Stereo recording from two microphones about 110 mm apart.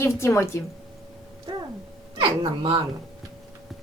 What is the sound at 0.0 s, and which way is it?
Speech, 25° left (ahead or behind).